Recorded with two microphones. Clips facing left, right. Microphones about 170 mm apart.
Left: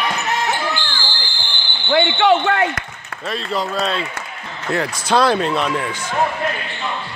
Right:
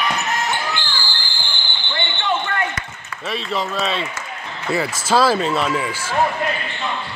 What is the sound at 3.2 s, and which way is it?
Speech, centre (ahead or behind).